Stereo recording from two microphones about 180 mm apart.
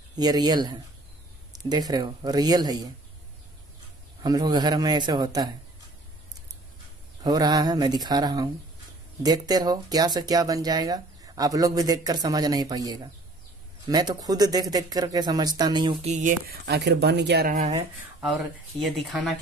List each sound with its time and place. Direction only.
0.1 s speech: 20° right (ahead or behind)
4.2 s speech: 20° right (ahead or behind)
7.2 s speech: 20° right (ahead or behind)
16.1 s speech: 45° right (ahead or behind)
16.6 s speech: 70° right (ahead or behind)
17.5 s speech: 40° right (ahead or behind)
18.8 s speech: centre (ahead or behind)